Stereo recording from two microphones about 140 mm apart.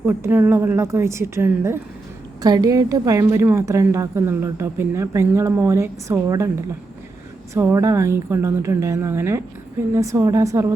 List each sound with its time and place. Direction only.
0.0 s a woman's voice: 15° right (ahead or behind)
2.4 s a woman's voice: 30° right (ahead or behind)